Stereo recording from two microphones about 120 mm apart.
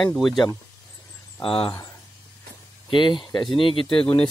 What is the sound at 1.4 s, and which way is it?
Speech, 50° left (ahead or behind).